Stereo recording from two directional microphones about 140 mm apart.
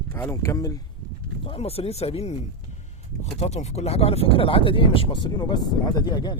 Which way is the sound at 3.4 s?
50° left (ahead or behind).